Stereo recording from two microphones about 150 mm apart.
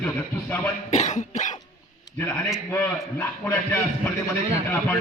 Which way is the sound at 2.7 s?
15° left (ahead or behind).